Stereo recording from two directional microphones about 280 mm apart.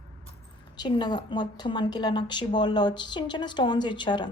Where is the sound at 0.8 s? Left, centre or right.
Centre.